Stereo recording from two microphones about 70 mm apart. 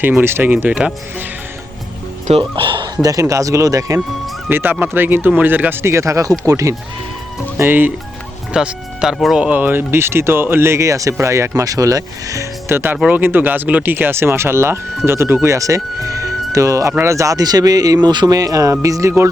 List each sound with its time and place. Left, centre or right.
0.2 s speech: right
2.4 s speech: right
4.4 s speech: right
5.8 s speech: right
7.5 s speech: right
8.5 s speech: centre
9.4 s speech: right
12.6 s speech: right
15.4 s speech: right